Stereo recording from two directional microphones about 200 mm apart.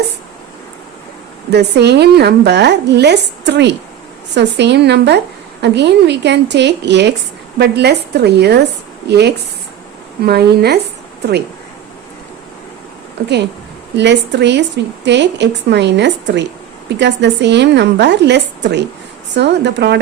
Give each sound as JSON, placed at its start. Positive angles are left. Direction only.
{"t": 1.5, "sound": "a woman's voice", "side_deg": -55}
{"t": 13.2, "sound": "a woman's voice", "side_deg": -50}